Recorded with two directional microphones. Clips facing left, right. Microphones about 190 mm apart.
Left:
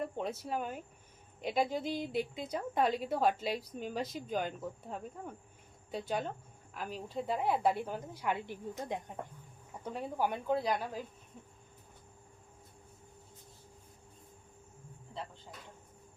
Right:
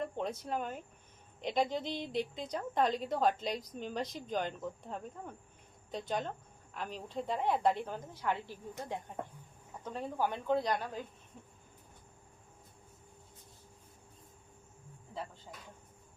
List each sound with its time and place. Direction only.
0.0 s speech: 5° left (ahead or behind)